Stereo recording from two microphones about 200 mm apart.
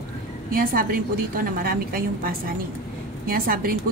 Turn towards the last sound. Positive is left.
turn(degrees=-50)  # may be behind; listen again after turning